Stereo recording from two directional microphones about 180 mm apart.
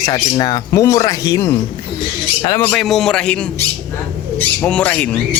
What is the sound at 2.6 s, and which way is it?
A man's voice, 5° left (ahead or behind).